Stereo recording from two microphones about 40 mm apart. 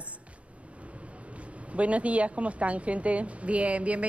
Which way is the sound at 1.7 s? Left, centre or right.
Right.